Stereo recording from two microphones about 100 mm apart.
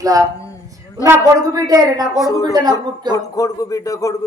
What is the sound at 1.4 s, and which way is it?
Speech, 35° right (ahead or behind).